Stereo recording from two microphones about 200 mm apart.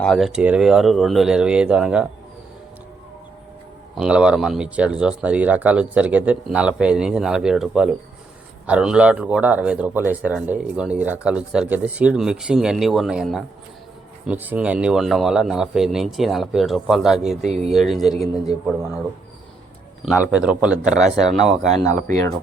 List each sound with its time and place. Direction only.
0.0 s speech: centre (ahead or behind)
3.9 s speech: 5° right (ahead or behind)
20.1 s speech: 5° right (ahead or behind)